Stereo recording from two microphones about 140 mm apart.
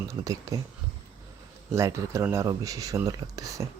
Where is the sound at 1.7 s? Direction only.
20° right (ahead or behind).